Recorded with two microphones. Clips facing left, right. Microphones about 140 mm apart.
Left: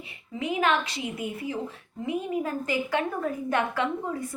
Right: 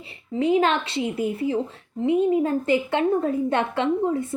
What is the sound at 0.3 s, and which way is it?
Speech, 30° right (ahead or behind).